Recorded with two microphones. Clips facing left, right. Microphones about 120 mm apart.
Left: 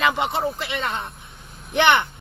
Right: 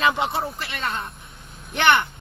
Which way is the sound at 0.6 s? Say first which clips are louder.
Left 2 dB; 20° left (ahead or behind).